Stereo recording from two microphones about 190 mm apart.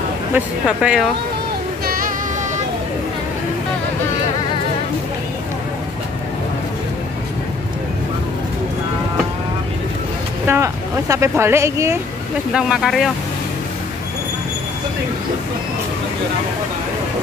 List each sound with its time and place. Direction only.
0.3 s speech: 5° right (ahead or behind)
1.9 s music: 50° right (ahead or behind)
10.4 s speech: 15° right (ahead or behind)
12.5 s speech: 5° right (ahead or behind)